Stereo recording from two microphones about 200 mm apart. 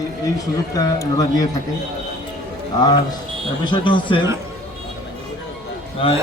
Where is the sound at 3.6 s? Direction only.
25° left (ahead or behind).